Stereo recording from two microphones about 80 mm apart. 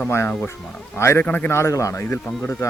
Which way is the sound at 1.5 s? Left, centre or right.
Left.